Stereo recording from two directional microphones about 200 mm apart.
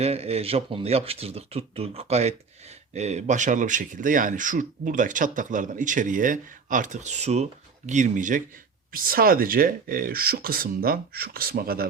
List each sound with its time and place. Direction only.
0.0 s speech: 30° right (ahead or behind); by 11.9 s 50° right (ahead or behind)